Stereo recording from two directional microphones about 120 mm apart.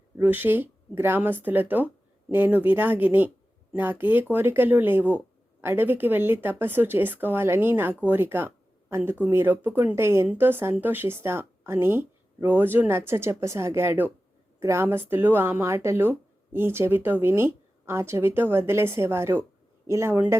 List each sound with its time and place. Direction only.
0.2 s speech: 15° right (ahead or behind)